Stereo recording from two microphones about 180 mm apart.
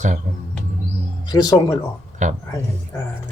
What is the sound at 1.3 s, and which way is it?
Speech, 20° left (ahead or behind).